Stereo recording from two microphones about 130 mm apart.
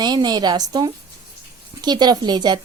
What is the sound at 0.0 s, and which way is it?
A woman's voice, 30° right (ahead or behind).